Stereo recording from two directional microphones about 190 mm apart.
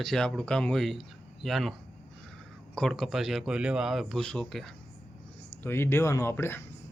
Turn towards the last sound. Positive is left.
turn(degrees=10)  # may be behind; listen again after turning